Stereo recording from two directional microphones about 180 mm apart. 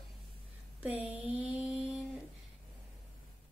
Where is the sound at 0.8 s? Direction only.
10° right (ahead or behind).